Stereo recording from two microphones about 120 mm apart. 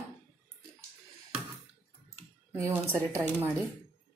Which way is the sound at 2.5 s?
20° right (ahead or behind).